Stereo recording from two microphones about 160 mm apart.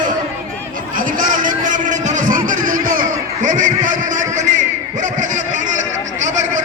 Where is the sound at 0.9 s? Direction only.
55° right (ahead or behind).